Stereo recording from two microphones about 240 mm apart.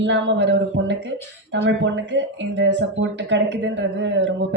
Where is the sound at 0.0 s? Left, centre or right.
Right.